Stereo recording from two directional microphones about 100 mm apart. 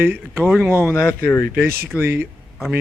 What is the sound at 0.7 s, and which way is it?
Speech, 20° right (ahead or behind).